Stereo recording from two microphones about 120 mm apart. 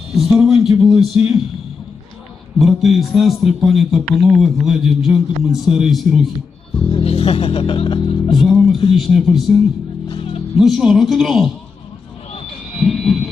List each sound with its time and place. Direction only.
0.3 s a man's voice: centre (ahead or behind)
2.6 s a man's voice: centre (ahead or behind)
6.9 s speech: 55° left (ahead or behind)
8.4 s music: 5° right (ahead or behind)
9.0 s a man's voice: centre (ahead or behind)
10.1 s music: 50° left (ahead or behind)
10.6 s a man's voice: centre (ahead or behind)
12.8 s a sound: centre (ahead or behind)